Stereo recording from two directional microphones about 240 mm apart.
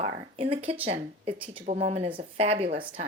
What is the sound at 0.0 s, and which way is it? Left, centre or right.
Speech, right.